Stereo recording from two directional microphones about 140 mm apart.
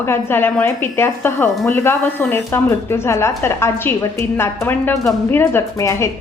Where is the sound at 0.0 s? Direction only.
15° left (ahead or behind).